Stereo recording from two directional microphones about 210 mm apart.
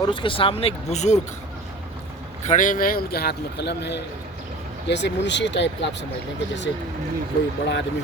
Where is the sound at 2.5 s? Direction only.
40° left (ahead or behind); by 5.9 s 55° left (ahead or behind).